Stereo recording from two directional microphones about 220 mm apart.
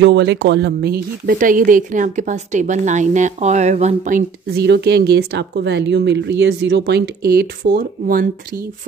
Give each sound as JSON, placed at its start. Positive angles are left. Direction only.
{"t": 0.0, "sound": "speech", "side_deg": -50}
{"t": 4.6, "sound": "speech", "side_deg": -50}